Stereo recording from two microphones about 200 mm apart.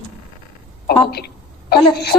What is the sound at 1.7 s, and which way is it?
Speech, 55° left (ahead or behind).